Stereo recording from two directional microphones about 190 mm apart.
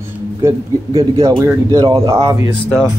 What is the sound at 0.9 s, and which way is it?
Speech, 30° right (ahead or behind).